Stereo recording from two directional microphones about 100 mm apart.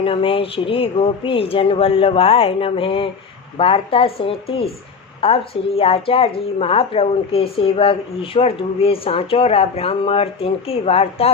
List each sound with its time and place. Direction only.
0.0 s a woman's voice: 65° left (ahead or behind); by 11.3 s 80° left